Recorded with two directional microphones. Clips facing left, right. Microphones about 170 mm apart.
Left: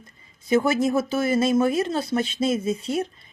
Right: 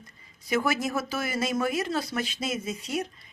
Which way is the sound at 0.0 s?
25° left (ahead or behind).